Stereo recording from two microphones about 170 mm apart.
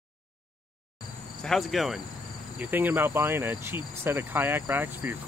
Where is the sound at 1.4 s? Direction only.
Centre (ahead or behind).